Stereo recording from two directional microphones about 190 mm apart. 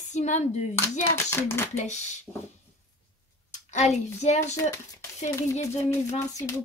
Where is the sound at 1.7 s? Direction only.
40° left (ahead or behind).